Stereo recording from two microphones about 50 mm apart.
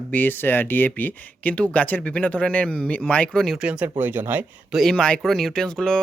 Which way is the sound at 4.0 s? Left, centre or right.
Right.